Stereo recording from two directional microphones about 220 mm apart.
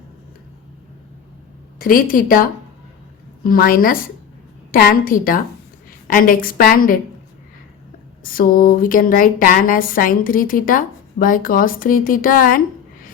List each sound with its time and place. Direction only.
1.8 s speech: 40° left (ahead or behind)
8.2 s speech: 40° left (ahead or behind)